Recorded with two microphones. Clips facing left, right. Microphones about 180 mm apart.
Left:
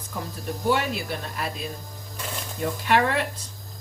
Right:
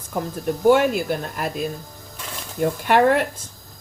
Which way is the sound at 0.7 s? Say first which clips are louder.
Right 8 dB; 50° right (ahead or behind).